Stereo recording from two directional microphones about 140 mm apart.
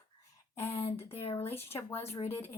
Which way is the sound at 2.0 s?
50° left (ahead or behind).